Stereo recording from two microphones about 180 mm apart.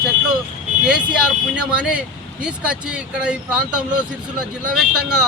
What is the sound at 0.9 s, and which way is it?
Speech, 5° right (ahead or behind).